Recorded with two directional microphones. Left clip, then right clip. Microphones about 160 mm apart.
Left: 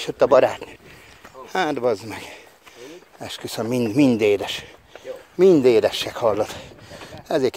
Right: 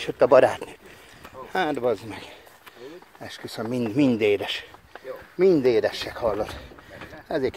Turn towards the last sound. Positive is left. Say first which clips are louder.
# left 5 dB
turn(degrees=55)  # may be behind; listen again after turning